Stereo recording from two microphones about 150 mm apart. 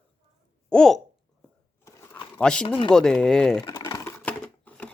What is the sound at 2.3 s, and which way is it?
Speech, 5° left (ahead or behind).